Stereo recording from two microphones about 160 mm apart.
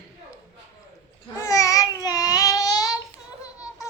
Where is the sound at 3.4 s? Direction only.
20° left (ahead or behind).